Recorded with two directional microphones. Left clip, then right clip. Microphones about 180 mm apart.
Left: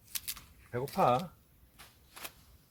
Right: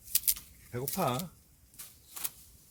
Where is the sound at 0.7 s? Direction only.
20° right (ahead or behind).